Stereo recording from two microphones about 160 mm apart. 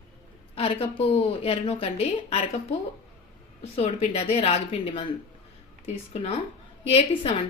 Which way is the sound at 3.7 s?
40° left (ahead or behind).